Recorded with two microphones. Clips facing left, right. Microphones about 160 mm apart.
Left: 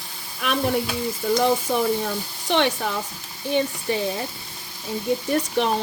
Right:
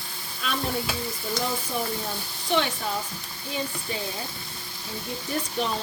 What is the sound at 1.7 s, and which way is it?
Stir, 75° left (ahead or behind).